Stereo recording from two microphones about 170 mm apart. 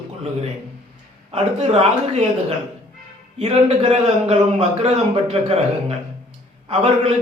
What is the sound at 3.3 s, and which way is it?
A man's voice, 40° right (ahead or behind).